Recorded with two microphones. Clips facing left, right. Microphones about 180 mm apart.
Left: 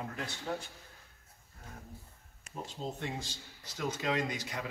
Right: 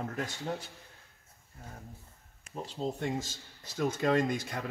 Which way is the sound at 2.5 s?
35° right (ahead or behind).